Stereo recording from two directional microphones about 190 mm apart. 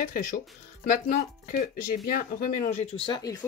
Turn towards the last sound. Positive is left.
turn(degrees=20)  # may be behind; listen again after turning